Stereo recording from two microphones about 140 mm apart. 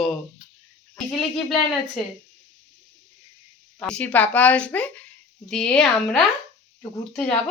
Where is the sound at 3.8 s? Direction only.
5° left (ahead or behind).